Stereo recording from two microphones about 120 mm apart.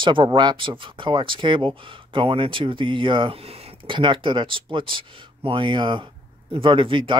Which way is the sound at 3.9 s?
45° right (ahead or behind).